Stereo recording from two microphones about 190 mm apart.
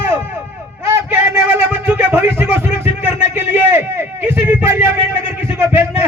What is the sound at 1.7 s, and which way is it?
Speech, 10° right (ahead or behind).